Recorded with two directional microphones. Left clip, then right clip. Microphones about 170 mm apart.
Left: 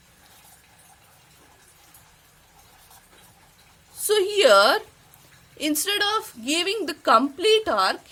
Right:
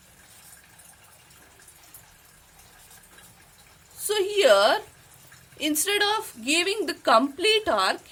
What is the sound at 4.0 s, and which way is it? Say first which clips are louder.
A woman's voice: left 3 dB; 30° left (ahead or behind).